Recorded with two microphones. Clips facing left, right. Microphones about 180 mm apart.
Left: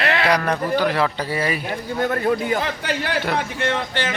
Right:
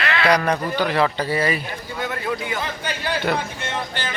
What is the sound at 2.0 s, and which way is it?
Speech, 40° left (ahead or behind).